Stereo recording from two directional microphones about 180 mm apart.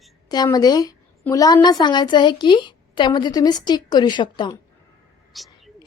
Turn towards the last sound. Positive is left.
turn(degrees=0)  # may be behind; listen again after turning